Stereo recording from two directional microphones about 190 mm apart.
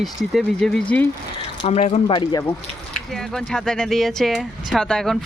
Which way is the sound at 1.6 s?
35° left (ahead or behind).